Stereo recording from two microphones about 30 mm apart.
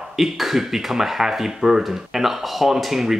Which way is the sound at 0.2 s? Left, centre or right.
Centre.